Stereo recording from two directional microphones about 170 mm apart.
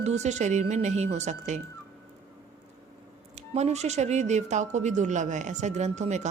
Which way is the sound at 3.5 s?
40° right (ahead or behind).